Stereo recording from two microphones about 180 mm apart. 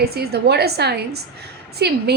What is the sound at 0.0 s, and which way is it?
A woman's voice, 60° right (ahead or behind).